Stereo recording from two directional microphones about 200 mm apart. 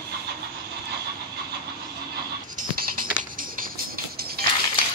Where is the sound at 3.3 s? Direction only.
45° right (ahead or behind).